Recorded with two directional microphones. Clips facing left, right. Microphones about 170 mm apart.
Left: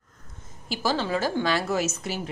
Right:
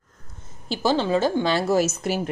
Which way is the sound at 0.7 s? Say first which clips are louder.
Right 5 dB; 25° right (ahead or behind).